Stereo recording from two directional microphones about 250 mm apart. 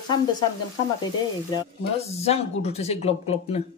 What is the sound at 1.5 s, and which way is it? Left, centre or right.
Speech, left.